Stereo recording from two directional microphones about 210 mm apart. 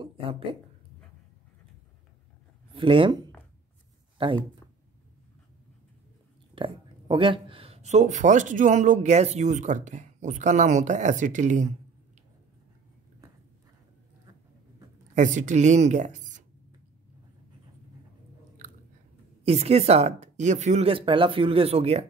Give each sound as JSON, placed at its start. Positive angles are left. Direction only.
{"t": 0.0, "sound": "speech", "side_deg": -25}
{"t": 2.7, "sound": "speech", "side_deg": -25}
{"t": 4.2, "sound": "speech", "side_deg": -25}
{"t": 6.5, "sound": "speech", "side_deg": -25}
{"t": 15.1, "sound": "speech", "side_deg": -35}
{"t": 19.4, "sound": "speech", "side_deg": -30}